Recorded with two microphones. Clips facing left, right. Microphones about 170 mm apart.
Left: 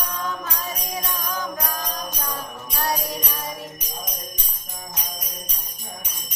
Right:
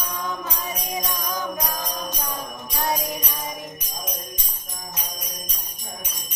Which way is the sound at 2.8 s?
15° right (ahead or behind).